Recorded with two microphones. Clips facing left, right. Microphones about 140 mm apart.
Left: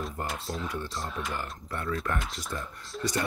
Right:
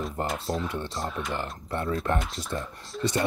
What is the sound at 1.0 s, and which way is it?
Speech, centre (ahead or behind).